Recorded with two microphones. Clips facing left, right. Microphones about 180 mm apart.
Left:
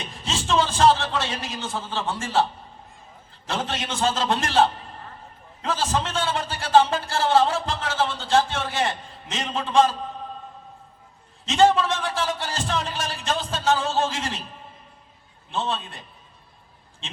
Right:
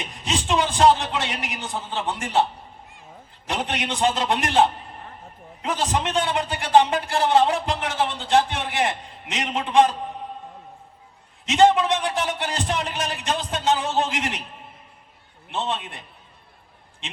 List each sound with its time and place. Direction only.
0.0 s a man's voice: 15° right (ahead or behind)
11.4 s speech: 15° right (ahead or behind)
15.4 s speech: 20° right (ahead or behind)